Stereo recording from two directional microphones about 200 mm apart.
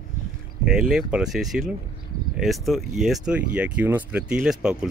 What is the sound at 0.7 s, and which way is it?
Speech, centre (ahead or behind).